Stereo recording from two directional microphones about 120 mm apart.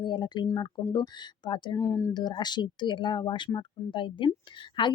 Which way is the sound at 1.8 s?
25° left (ahead or behind).